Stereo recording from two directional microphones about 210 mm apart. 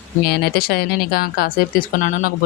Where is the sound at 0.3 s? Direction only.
45° left (ahead or behind).